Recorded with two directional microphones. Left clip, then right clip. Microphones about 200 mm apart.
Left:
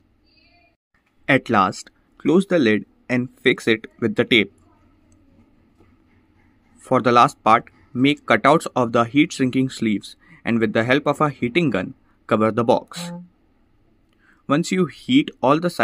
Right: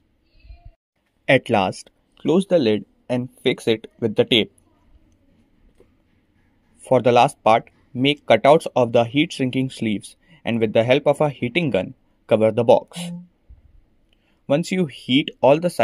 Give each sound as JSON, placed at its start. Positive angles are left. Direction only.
{"t": 1.2, "sound": "speech", "side_deg": -15}
{"t": 6.8, "sound": "speech", "side_deg": -15}
{"t": 14.2, "sound": "speech", "side_deg": -15}